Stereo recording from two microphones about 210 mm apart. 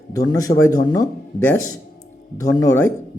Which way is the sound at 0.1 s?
15° left (ahead or behind).